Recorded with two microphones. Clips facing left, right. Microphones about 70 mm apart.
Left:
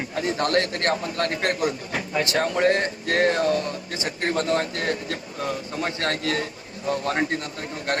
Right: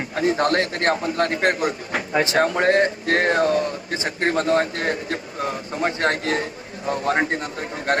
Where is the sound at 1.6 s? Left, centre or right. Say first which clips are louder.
Right 2 dB; right.